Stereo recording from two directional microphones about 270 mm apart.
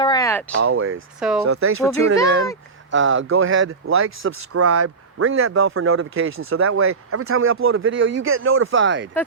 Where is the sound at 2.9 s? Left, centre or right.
Right.